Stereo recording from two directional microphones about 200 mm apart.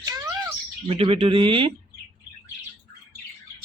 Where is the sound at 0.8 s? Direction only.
30° right (ahead or behind).